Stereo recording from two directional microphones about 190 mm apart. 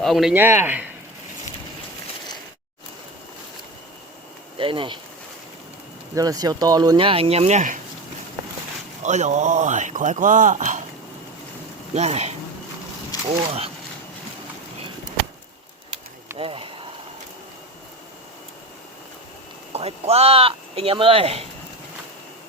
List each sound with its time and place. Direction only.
0.0 s a man's voice: centre (ahead or behind)
4.5 s speech: 25° right (ahead or behind)
6.1 s speech: 20° right (ahead or behind); by 7.8 s 40° right (ahead or behind)
9.0 s speech: 40° right (ahead or behind)
11.9 s speech: 35° right (ahead or behind)
13.1 s a sound: 20° left (ahead or behind)
16.4 s a sound: 30° right (ahead or behind)
19.7 s speech: 35° right (ahead or behind)